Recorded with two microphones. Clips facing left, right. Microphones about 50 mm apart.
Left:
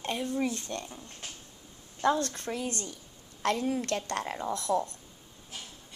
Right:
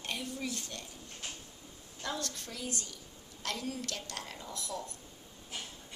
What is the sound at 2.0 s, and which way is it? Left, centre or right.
A woman's voice, left.